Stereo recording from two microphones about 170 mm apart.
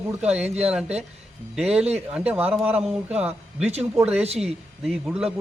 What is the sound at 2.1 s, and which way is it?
Speech, 5° right (ahead or behind).